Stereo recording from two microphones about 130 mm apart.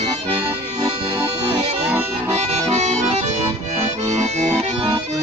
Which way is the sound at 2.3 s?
55° right (ahead or behind).